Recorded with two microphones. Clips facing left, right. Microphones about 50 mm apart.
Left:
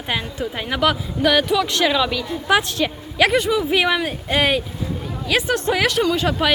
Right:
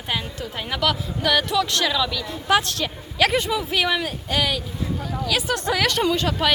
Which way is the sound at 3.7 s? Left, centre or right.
Centre.